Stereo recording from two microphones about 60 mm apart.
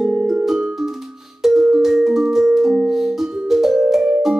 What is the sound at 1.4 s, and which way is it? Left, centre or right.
Music, centre.